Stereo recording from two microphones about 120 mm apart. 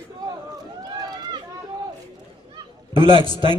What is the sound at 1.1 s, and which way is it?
Run, 35° right (ahead or behind).